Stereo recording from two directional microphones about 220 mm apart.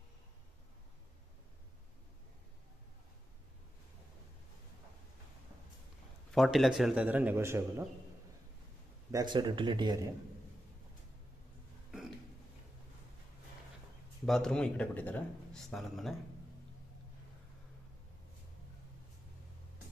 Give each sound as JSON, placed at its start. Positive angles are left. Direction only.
{"t": 6.3, "sound": "speech", "side_deg": 0}
{"t": 9.1, "sound": "speech", "side_deg": -20}
{"t": 14.2, "sound": "speech", "side_deg": 0}